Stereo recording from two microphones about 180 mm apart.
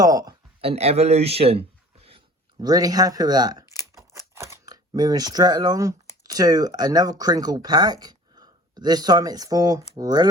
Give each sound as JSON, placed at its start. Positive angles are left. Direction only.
{"t": 0.0, "sound": "speech", "side_deg": -20}
{"t": 0.6, "sound": "a man's voice", "side_deg": -35}